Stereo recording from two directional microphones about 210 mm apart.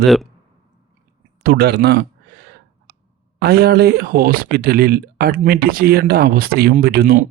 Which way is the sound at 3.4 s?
50° right (ahead or behind).